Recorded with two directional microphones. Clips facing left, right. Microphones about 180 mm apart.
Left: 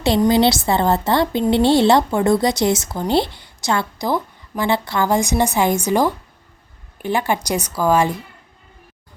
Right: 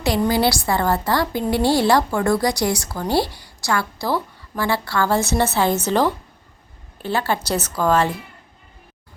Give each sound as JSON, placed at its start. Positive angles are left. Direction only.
{"t": 0.2, "sound": "a woman's voice", "side_deg": 25}